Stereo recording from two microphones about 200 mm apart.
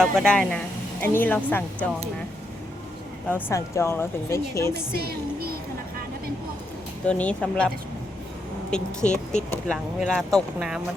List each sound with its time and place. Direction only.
0.0 s a woman's voice: centre (ahead or behind)
3.2 s a woman's voice: 10° left (ahead or behind)
5.0 s a sound: 50° right (ahead or behind)
7.1 s speech: 5° left (ahead or behind)
8.7 s speech: 5° left (ahead or behind)